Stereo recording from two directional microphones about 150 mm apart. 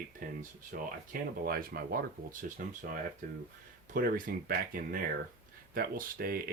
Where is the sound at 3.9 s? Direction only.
75° right (ahead or behind).